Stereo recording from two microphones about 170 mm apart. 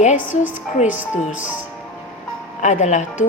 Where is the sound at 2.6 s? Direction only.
45° left (ahead or behind).